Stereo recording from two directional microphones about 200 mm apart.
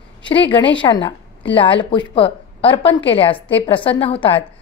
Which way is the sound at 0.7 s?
25° left (ahead or behind).